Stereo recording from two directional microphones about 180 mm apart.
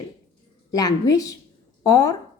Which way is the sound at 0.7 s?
20° left (ahead or behind).